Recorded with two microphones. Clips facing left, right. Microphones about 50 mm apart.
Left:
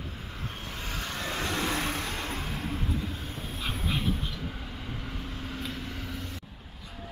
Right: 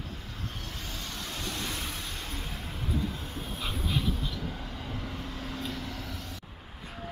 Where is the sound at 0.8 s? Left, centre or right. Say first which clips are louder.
Left 8 dB; left.